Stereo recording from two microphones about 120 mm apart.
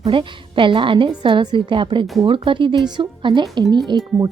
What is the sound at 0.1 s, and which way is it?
Speech, 45° right (ahead or behind).